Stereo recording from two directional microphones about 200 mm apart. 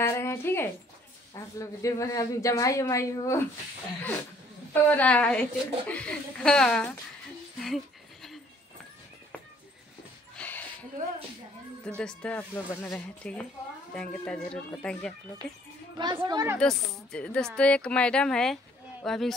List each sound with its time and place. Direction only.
0.0 s a woman's voice: 15° left (ahead or behind)
4.8 s a woman's voice: 5° left (ahead or behind)
7.6 s a sound: centre (ahead or behind)
10.3 s a sound: 10° left (ahead or behind)
12.0 s a woman's voice: 5° left (ahead or behind)
16.0 s speech: 20° right (ahead or behind)
16.5 s a woman's voice: 5° left (ahead or behind)